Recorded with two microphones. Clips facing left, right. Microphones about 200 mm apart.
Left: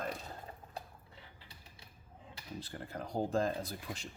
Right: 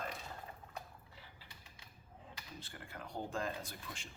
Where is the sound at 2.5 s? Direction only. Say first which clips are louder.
Left 9 dB; 35° left (ahead or behind).